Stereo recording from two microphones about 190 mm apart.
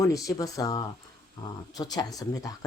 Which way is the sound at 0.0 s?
20° left (ahead or behind).